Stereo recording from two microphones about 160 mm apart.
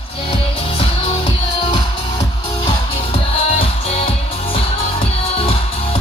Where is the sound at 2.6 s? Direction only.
35° left (ahead or behind).